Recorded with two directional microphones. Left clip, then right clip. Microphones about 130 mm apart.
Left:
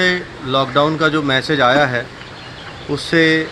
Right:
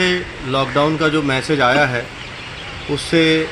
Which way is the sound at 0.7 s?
5° left (ahead or behind).